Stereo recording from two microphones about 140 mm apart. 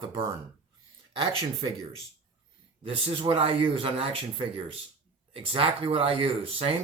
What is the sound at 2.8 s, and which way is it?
Speech, 45° right (ahead or behind).